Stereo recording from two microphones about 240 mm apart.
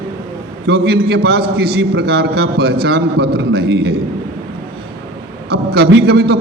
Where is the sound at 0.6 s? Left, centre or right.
Right.